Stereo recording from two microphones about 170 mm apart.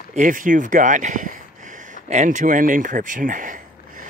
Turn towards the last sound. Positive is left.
turn(degrees=-50)  # may be behind; listen again after turning